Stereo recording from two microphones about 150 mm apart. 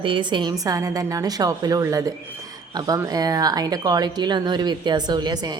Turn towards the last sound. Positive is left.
turn(degrees=-25)  # may be behind; listen again after turning